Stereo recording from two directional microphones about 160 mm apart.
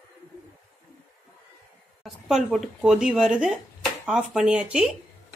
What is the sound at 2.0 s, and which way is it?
Speech, centre (ahead or behind).